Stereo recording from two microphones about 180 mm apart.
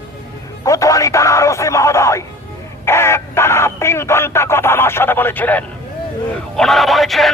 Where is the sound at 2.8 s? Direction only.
15° left (ahead or behind).